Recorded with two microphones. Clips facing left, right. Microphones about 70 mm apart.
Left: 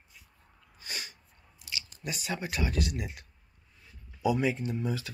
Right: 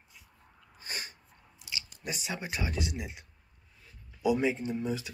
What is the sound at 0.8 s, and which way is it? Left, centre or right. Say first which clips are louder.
Sneeze: even; right.